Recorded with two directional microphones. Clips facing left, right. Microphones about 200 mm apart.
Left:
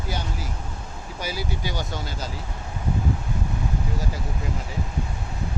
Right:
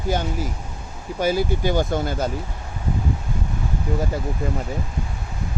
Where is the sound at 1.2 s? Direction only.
50° right (ahead or behind).